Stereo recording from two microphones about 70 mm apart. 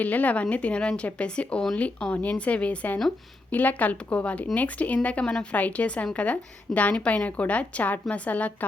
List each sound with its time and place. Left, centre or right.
0.0 s speech: left